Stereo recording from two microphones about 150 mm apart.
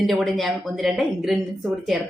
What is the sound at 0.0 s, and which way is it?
A woman's voice, centre (ahead or behind).